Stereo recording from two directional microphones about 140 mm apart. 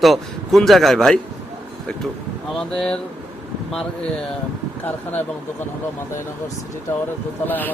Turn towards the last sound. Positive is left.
turn(degrees=15)  # may be behind; listen again after turning